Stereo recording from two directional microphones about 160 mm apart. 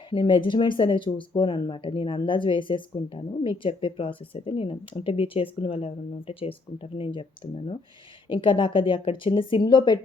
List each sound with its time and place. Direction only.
0.1 s speech: 30° left (ahead or behind)
8.3 s speech: 30° left (ahead or behind)